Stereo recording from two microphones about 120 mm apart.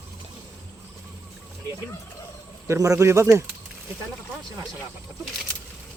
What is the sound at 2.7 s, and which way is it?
Speech, 25° right (ahead or behind).